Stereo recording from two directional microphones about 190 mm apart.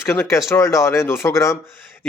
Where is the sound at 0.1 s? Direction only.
10° left (ahead or behind).